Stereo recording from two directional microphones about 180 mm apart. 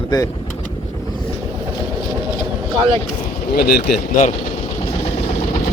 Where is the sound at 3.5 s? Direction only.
60° left (ahead or behind).